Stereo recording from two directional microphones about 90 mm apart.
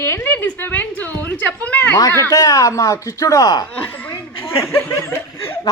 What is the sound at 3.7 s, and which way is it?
Speech, 20° left (ahead or behind).